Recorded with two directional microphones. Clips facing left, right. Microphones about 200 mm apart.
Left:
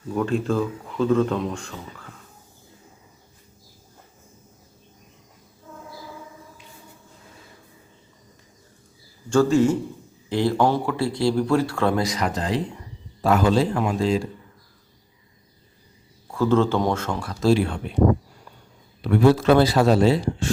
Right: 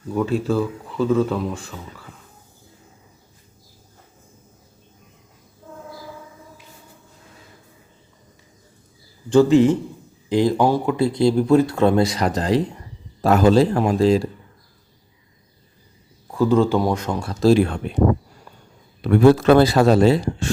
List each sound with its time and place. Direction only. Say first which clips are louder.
0.1 s speech: right 2 dB; centre (ahead or behind)
9.3 s speech: right 4 dB; 15° right (ahead or behind); by 14.3 s 40° right (ahead or behind)
16.3 s speech: right 3 dB; 15° right (ahead or behind)
17.4 s speech: right 4 dB; 45° right (ahead or behind)
19.0 s speech: right 4 dB; 50° right (ahead or behind)